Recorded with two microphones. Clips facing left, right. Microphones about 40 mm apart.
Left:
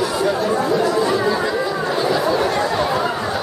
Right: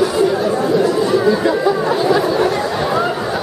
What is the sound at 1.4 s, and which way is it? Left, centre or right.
Chatter, centre.